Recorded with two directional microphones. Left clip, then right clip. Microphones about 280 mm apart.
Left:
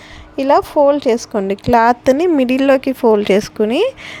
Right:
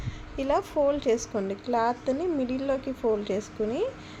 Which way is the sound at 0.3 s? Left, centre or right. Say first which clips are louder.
Left 14 dB; left.